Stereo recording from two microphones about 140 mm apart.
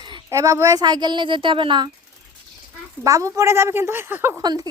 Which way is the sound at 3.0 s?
25° right (ahead or behind).